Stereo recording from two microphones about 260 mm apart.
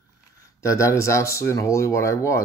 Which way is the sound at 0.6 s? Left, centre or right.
Centre.